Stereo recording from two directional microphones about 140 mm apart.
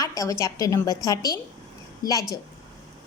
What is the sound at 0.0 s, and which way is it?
A woman's voice, 25° left (ahead or behind).